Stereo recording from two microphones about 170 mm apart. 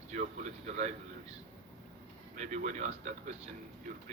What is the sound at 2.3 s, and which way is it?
Speech, 45° right (ahead or behind).